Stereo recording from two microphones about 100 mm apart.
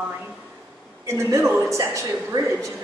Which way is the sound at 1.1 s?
25° right (ahead or behind).